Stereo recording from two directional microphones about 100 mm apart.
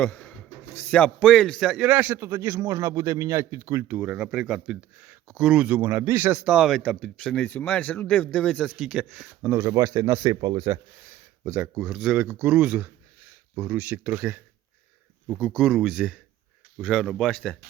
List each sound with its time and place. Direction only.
0.0 s a man's voice: 15° left (ahead or behind)
1.8 s a man's voice: 15° right (ahead or behind); by 3.8 s 35° right (ahead or behind)
3.8 s speech: 15° right (ahead or behind)
6.3 s a man's voice: 5° right (ahead or behind)
9.4 s a man's voice: 25° right (ahead or behind)
9.6 s speech: 40° right (ahead or behind)
11.4 s speech: 20° right (ahead or behind)
12.1 s speech: 15° right (ahead or behind); by 17.3 s 5° left (ahead or behind)